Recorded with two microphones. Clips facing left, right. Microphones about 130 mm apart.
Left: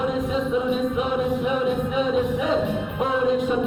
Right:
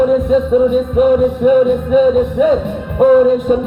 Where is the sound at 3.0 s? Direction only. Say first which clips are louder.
Right 14 dB; 50° right (ahead or behind).